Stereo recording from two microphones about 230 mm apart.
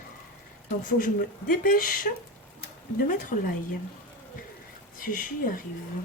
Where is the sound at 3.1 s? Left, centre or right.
Left.